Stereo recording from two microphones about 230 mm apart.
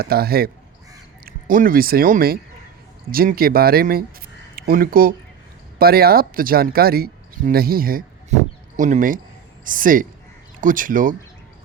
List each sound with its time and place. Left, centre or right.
0.0 s speech: right